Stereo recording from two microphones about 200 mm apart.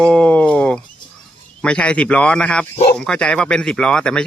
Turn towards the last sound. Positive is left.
turn(degrees=5)  # may be behind; listen again after turning